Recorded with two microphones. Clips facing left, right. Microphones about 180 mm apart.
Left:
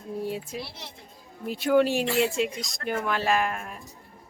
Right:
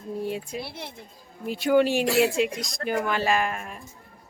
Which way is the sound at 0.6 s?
55° right (ahead or behind).